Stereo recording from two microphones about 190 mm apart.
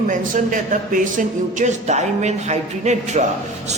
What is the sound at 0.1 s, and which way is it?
A man's voice, 45° right (ahead or behind).